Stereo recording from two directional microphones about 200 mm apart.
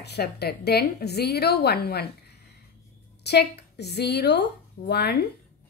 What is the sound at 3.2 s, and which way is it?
A woman's voice, 55° left (ahead or behind).